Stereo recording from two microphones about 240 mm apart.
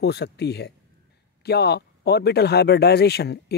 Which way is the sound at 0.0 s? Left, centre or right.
Left.